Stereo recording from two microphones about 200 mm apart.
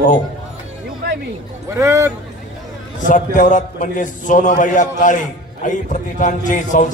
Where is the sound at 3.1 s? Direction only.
40° left (ahead or behind).